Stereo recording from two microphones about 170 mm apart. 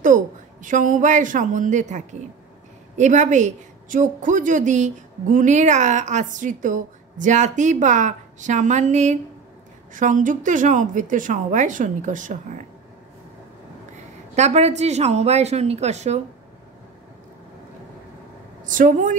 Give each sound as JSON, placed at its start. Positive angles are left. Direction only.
{"t": 0.0, "sound": "a woman's voice", "side_deg": -50}
{"t": 14.3, "sound": "speech", "side_deg": -40}
{"t": 18.6, "sound": "a woman's voice", "side_deg": -50}